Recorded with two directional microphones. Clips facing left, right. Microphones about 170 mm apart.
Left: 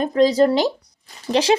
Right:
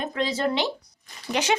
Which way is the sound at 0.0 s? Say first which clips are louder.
Left 11 dB; 35° left (ahead or behind).